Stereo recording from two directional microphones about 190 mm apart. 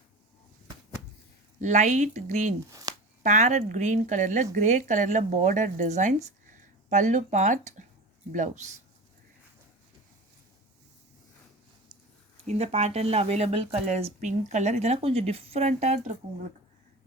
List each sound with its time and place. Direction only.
1.6 s speech: 40° right (ahead or behind)
2.6 s speech: 15° right (ahead or behind)
3.2 s speech: 40° right (ahead or behind)
12.5 s speech: 35° right (ahead or behind)